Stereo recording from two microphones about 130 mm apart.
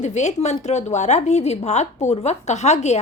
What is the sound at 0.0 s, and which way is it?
A woman's voice, 65° left (ahead or behind).